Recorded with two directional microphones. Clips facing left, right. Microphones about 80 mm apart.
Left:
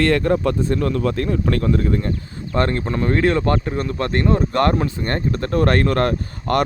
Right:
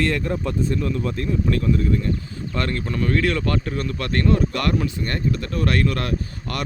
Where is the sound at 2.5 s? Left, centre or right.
Left.